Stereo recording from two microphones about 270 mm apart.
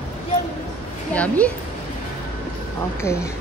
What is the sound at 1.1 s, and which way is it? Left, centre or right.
Speech, centre.